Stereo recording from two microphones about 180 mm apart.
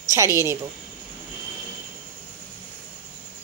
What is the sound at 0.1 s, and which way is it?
Speech, 15° right (ahead or behind).